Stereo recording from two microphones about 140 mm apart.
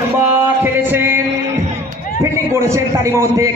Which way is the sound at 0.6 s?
15° right (ahead or behind).